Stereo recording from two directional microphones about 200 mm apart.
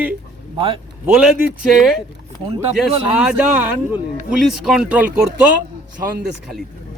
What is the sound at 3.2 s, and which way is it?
Speech, 5° right (ahead or behind).